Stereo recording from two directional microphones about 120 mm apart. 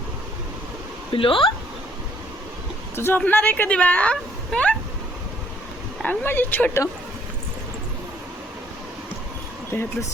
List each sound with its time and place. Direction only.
1.1 s speech: 45° left (ahead or behind)
2.9 s a woman's voice: 20° left (ahead or behind)
6.0 s a woman's voice: 15° left (ahead or behind)
9.7 s speech: 20° left (ahead or behind)